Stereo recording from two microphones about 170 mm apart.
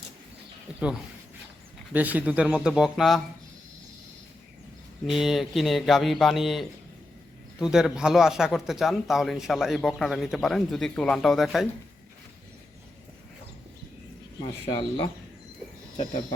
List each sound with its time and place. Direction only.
0.7 s speech: 5° right (ahead or behind)
1.9 s speech: 10° right (ahead or behind)
5.0 s speech: centre (ahead or behind)
14.4 s speech: 25° left (ahead or behind)